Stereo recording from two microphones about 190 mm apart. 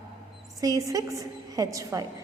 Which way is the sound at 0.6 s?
20° right (ahead or behind).